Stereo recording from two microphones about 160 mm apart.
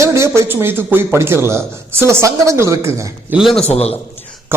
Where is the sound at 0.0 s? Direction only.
15° right (ahead or behind).